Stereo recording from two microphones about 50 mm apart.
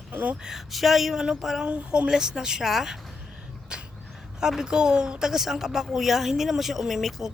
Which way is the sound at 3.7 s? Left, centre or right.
Centre.